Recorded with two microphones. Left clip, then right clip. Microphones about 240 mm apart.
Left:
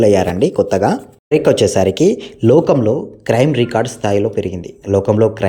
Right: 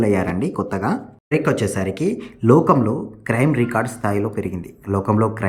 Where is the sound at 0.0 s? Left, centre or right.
Centre.